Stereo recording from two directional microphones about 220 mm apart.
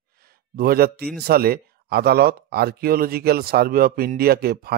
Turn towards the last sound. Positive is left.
turn(degrees=-45)  # may be behind; listen again after turning